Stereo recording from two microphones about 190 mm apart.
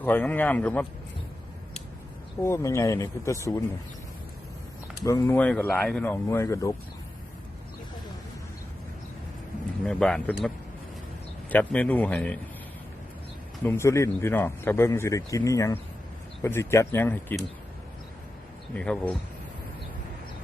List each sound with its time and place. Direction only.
0.0 s speech: 10° left (ahead or behind)
2.4 s speech: 15° left (ahead or behind)
5.0 s speech: 15° left (ahead or behind)
9.8 s speech: 5° left (ahead or behind)
13.7 s speech: 15° left (ahead or behind)
18.7 s speech: 5° left (ahead or behind)